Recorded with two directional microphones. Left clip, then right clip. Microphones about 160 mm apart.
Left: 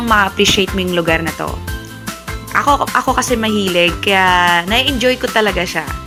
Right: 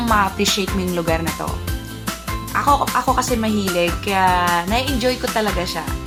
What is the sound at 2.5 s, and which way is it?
A woman's voice, 25° left (ahead or behind).